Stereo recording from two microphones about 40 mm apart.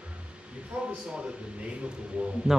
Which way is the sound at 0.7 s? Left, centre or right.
Right.